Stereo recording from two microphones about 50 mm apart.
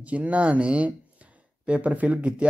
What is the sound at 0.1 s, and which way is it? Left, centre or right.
Speech, right.